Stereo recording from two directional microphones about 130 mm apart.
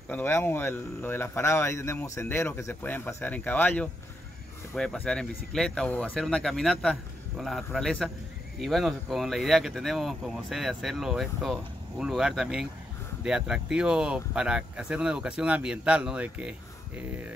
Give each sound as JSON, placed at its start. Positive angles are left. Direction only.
{"t": 0.1, "sound": "speech", "side_deg": 15}